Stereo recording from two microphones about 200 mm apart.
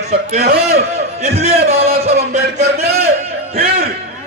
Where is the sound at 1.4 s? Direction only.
30° right (ahead or behind).